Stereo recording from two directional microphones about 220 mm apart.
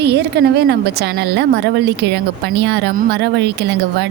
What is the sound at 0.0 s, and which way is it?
A woman's voice, 50° right (ahead or behind).